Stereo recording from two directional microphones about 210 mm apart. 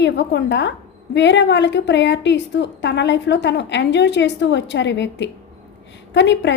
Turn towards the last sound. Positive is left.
turn(degrees=55)  # may be behind; listen again after turning